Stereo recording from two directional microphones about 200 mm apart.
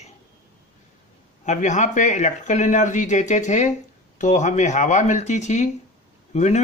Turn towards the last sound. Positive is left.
turn(degrees=35)  # may be behind; listen again after turning